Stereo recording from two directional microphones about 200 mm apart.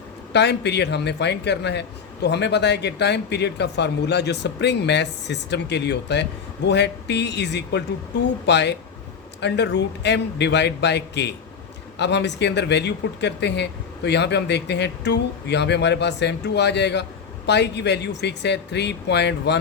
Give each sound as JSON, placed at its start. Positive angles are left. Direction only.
{"t": 0.3, "sound": "speech", "side_deg": 60}